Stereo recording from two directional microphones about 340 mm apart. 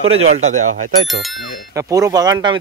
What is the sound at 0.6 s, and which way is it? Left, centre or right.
Speech, right.